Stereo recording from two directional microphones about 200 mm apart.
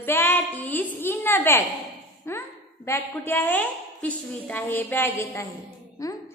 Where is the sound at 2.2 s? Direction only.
10° left (ahead or behind).